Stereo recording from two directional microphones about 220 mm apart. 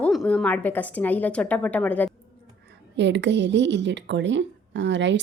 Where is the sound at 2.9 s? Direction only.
55° right (ahead or behind).